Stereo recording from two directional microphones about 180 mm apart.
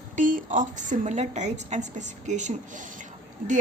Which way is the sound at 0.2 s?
50° right (ahead or behind).